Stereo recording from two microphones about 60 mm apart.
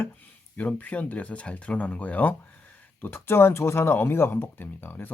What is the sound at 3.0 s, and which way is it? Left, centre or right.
Speech, left.